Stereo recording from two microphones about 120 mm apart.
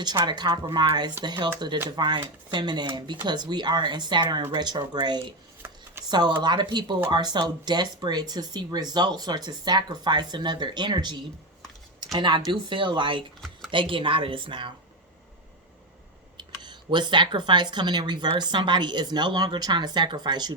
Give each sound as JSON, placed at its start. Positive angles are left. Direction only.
{"t": 0.0, "sound": "speech", "side_deg": -35}
{"t": 5.6, "sound": "a sound", "side_deg": -20}
{"t": 6.1, "sound": "speech", "side_deg": -40}
{"t": 16.4, "sound": "speech", "side_deg": -40}